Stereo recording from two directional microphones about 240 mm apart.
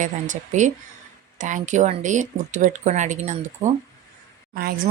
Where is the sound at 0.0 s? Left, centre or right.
Right.